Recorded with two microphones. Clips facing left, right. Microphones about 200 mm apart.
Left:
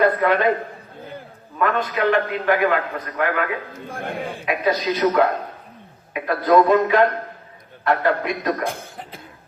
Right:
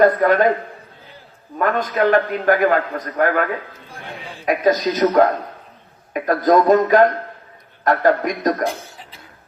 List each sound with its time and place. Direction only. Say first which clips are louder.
0.0 s a man's voice: right 4 dB; 45° right (ahead or behind)
1.5 s a man's voice: right 3 dB; 45° right (ahead or behind)
3.8 s speech: left 7 dB; 50° left (ahead or behind)
4.4 s a man's voice: right 5 dB; 40° right (ahead or behind)
8.6 s speech: right 3 dB; 55° left (ahead or behind)